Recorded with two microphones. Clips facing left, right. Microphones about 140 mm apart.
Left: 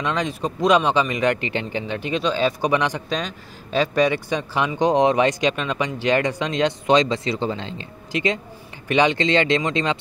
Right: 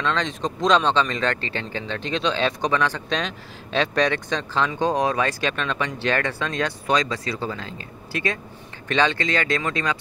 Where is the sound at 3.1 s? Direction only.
5° left (ahead or behind).